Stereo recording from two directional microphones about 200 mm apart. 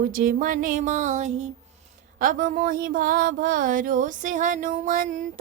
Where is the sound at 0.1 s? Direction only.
45° right (ahead or behind).